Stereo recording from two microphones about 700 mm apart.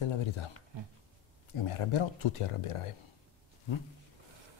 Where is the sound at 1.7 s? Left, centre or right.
Left.